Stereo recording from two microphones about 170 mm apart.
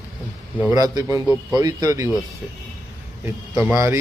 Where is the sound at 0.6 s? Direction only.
15° right (ahead or behind).